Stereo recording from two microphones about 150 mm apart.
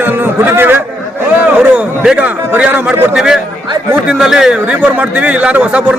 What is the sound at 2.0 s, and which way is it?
A man's voice, 10° right (ahead or behind).